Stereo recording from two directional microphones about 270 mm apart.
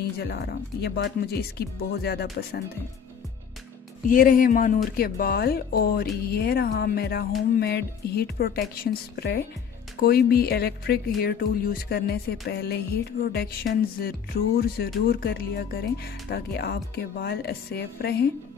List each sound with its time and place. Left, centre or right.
0.2 s music: left
4.1 s music: left